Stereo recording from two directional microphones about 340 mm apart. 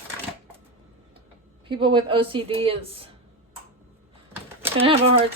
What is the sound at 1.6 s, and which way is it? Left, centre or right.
A woman's voice, centre.